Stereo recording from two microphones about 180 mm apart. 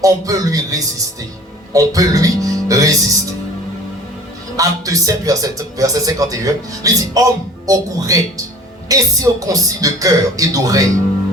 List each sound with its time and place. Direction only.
0.0 s speech: 20° right (ahead or behind)
4.5 s speech: 20° right (ahead or behind)